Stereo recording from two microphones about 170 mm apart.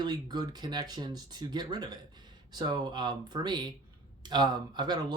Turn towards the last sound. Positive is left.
turn(degrees=-25)  # may be behind; listen again after turning